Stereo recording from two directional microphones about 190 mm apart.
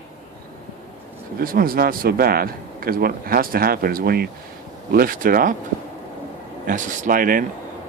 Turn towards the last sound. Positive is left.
turn(degrees=-45)  # may be behind; listen again after turning